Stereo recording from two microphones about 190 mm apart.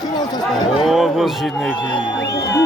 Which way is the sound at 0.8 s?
Centre (ahead or behind).